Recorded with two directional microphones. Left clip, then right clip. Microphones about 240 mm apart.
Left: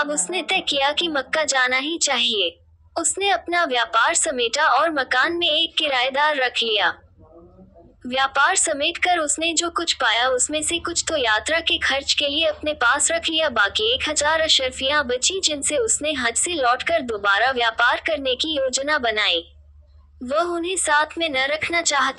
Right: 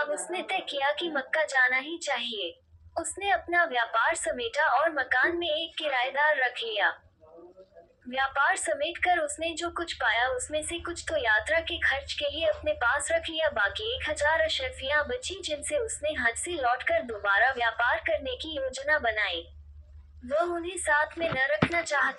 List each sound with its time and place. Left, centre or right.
0.0 s a woman's voice: left
8.1 s a woman's voice: left